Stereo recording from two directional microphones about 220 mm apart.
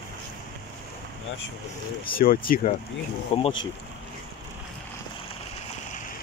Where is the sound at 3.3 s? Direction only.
30° left (ahead or behind).